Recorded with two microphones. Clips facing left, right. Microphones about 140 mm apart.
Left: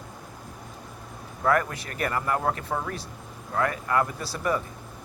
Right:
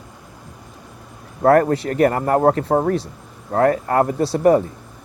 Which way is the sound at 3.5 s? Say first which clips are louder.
Right 10 dB; 40° right (ahead or behind).